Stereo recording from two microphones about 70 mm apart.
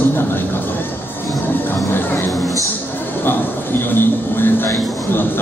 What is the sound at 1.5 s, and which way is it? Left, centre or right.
Music, left.